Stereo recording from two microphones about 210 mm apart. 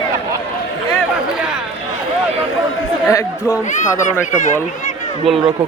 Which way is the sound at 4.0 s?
35° left (ahead or behind).